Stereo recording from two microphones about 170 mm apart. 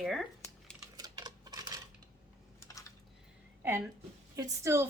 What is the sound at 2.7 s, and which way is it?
Typing, 20° left (ahead or behind).